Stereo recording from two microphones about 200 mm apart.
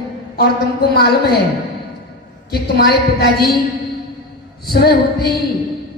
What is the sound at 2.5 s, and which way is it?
A woman's voice, 50° left (ahead or behind).